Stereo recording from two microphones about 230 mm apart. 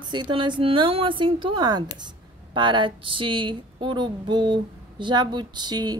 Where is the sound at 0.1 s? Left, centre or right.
Right.